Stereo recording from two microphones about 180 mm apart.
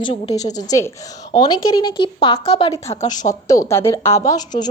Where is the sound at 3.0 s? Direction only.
45° left (ahead or behind).